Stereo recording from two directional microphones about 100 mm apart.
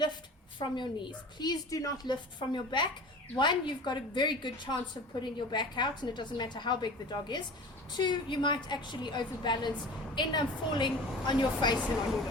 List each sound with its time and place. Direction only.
0.6 s a woman's voice: 50° left (ahead or behind)